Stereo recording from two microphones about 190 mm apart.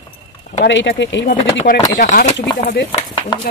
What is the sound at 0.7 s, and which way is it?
Speech, 70° left (ahead or behind).